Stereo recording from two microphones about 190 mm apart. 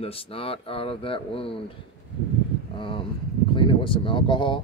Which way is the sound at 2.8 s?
25° left (ahead or behind).